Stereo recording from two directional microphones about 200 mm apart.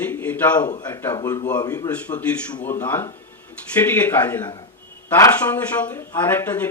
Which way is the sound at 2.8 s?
10° left (ahead or behind).